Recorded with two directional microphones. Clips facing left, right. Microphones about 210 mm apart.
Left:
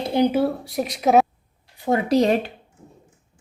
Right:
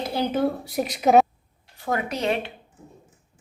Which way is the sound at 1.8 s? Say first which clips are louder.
Left 8 dB; 25° left (ahead or behind).